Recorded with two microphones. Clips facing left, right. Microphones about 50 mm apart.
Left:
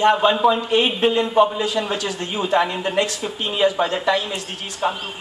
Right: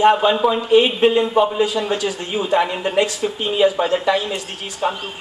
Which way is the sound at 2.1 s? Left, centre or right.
Centre.